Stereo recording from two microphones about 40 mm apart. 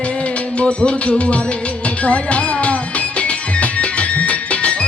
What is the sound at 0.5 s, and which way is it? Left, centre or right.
Music, left.